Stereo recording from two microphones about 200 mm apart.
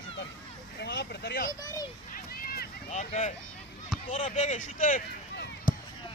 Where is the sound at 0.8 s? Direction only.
55° left (ahead or behind).